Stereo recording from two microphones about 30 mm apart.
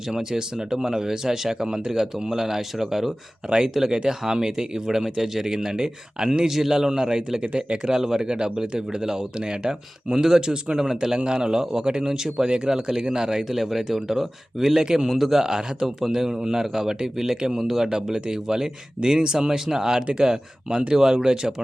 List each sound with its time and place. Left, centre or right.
0.1 s speech: right
3.4 s speech: right
6.5 s speech: centre
6.9 s speech: right
7.4 s speech: right
7.8 s speech: centre
10.8 s speech: centre
11.3 s speech: right
13.5 s speech: centre